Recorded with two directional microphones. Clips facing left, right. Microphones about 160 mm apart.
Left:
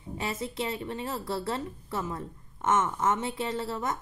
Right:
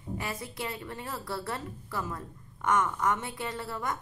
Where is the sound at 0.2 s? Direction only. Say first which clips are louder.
Left 8 dB; 25° left (ahead or behind).